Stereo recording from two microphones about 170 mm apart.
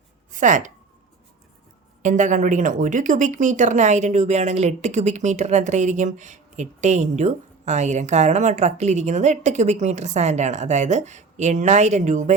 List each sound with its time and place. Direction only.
0.3 s speech: 50° right (ahead or behind)
2.0 s speech: 45° right (ahead or behind)